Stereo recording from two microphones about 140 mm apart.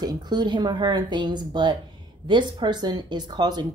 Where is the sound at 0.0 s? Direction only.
30° right (ahead or behind).